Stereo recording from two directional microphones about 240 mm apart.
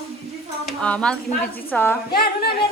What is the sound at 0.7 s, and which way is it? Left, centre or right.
A woman's voice, centre.